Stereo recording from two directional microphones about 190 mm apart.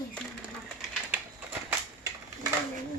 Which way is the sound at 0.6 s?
5° right (ahead or behind).